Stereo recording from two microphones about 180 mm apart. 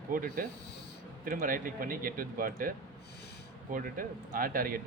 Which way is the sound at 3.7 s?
50° right (ahead or behind).